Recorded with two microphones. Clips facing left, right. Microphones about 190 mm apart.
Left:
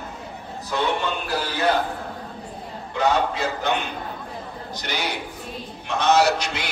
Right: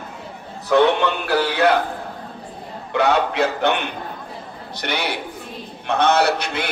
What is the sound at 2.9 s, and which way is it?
A man's voice, 70° right (ahead or behind).